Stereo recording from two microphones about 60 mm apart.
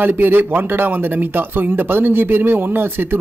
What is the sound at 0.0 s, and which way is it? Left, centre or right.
Speech, right.